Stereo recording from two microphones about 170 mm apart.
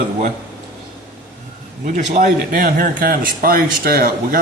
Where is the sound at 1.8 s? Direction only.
50° right (ahead or behind).